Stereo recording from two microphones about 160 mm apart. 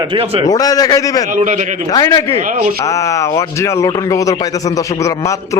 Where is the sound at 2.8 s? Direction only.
20° left (ahead or behind).